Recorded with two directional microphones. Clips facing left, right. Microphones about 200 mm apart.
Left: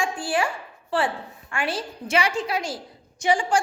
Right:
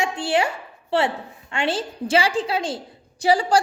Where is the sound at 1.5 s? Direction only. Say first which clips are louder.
Right 4 dB; 25° right (ahead or behind).